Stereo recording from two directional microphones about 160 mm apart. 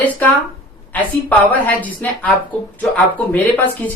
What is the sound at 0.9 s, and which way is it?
Speech, 10° left (ahead or behind).